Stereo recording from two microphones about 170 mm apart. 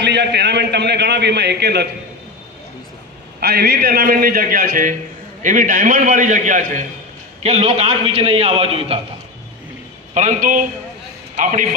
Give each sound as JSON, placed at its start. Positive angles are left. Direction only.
{"t": 0.0, "sound": "a man's voice", "side_deg": -90}
{"t": 3.4, "sound": "a man's voice", "side_deg": -65}
{"t": 7.4, "sound": "a man's voice", "side_deg": -35}
{"t": 10.2, "sound": "a man's voice", "side_deg": -45}